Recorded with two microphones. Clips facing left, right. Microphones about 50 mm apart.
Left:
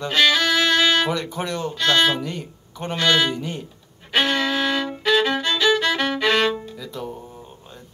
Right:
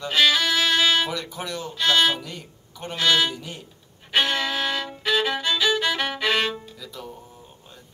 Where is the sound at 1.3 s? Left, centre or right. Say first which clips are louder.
Left 5 dB; left.